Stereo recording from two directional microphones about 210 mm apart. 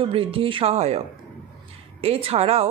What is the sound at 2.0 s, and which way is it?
Speech, 30° right (ahead or behind).